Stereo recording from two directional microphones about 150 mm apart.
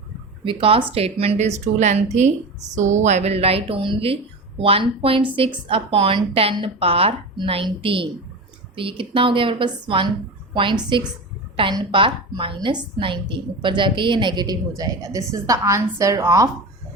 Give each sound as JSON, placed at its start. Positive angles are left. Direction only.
{"t": 0.4, "sound": "a woman's voice", "side_deg": -35}